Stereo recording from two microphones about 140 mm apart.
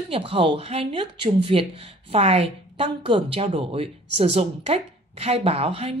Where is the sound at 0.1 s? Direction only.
40° right (ahead or behind).